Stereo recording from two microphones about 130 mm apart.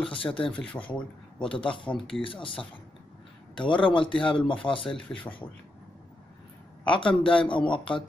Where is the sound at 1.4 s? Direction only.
40° left (ahead or behind).